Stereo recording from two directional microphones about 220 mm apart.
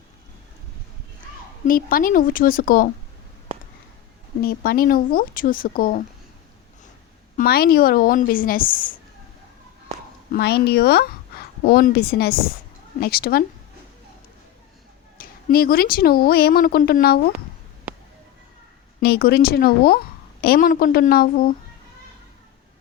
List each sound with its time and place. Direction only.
1.6 s speech: 40° left (ahead or behind)
4.4 s speech: 40° left (ahead or behind)
7.3 s speech: 45° left (ahead or behind)
10.3 s speech: 45° left (ahead or behind)
15.2 s speech: 40° left (ahead or behind)
18.9 s speech: 45° left (ahead or behind)